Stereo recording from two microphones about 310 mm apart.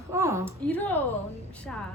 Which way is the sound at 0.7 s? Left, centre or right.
Centre.